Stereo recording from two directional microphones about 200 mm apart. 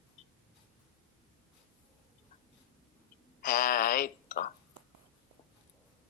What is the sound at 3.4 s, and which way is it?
Speech, 45° left (ahead or behind).